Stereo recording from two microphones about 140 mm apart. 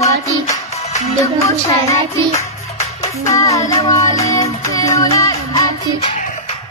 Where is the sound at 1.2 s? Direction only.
20° left (ahead or behind).